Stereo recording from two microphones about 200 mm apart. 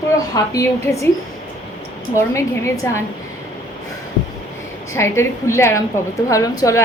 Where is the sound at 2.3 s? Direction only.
15° left (ahead or behind).